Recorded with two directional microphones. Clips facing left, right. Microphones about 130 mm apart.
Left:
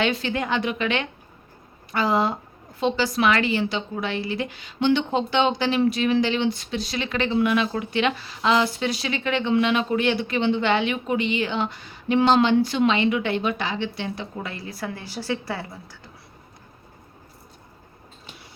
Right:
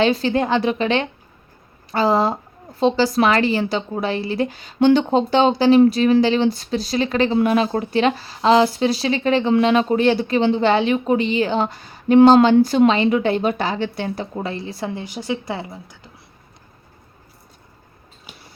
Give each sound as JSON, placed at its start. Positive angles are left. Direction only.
{"t": 0.0, "sound": "a woman's voice", "side_deg": -35}